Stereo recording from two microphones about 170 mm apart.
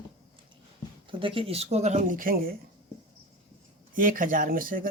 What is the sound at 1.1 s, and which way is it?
Speech, 30° right (ahead or behind).